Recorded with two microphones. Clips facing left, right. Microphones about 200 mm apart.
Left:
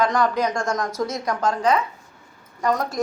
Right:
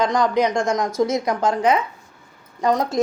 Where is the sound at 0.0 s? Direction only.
15° right (ahead or behind).